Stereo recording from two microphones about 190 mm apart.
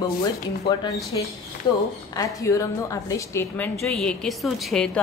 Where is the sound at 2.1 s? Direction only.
15° left (ahead or behind).